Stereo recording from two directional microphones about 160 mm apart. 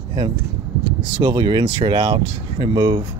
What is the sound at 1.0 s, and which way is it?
Speech, 30° right (ahead or behind).